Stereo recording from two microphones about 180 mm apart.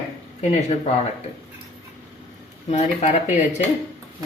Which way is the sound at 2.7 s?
40° left (ahead or behind).